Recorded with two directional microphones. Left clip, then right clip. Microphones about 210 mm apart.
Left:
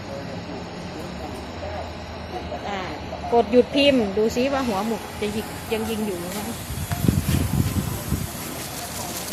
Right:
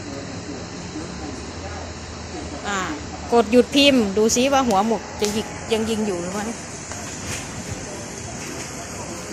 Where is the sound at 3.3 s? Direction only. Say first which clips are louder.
Right 2 dB; 35° right (ahead or behind).